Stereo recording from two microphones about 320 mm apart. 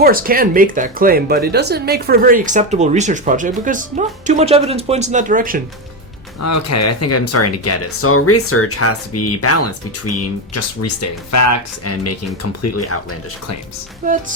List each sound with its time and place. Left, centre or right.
0.0 s speech: right
6.4 s speech: left